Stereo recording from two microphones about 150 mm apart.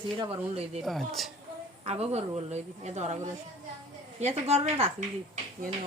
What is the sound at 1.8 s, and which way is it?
A woman's voice, 45° right (ahead or behind).